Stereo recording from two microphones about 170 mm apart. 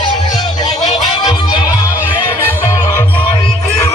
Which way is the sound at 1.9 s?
10° right (ahead or behind).